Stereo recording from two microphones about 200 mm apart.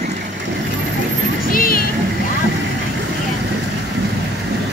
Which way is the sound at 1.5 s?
45° left (ahead or behind).